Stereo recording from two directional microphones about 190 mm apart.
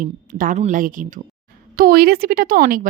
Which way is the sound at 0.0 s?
45° right (ahead or behind).